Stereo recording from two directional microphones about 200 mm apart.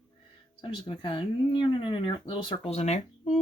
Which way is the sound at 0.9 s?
25° left (ahead or behind).